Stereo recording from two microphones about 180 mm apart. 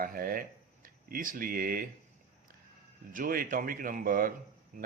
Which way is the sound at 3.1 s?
50° right (ahead or behind).